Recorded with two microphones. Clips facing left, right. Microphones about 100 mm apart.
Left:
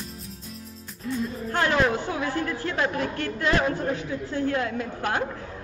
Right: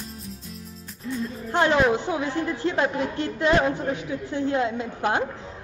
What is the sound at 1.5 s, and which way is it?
A woman's voice, 20° right (ahead or behind).